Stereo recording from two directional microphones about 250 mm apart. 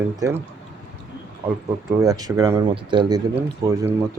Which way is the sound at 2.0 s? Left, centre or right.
Centre.